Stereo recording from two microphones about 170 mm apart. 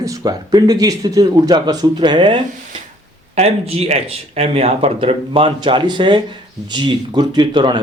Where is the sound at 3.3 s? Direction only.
40° right (ahead or behind).